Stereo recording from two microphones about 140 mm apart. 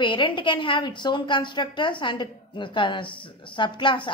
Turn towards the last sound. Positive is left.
turn(degrees=35)  # may be behind; listen again after turning